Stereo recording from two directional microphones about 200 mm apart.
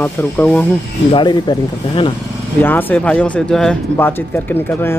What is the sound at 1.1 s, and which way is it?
Speech, 25° left (ahead or behind).